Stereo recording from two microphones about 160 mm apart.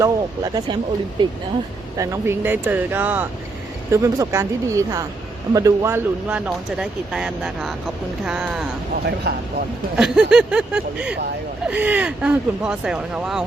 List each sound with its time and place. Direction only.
0.0 s speech: 25° right (ahead or behind)
2.0 s speech: 15° right (ahead or behind)
9.0 s speech: 90° right
10.0 s speech: 5° right (ahead or behind)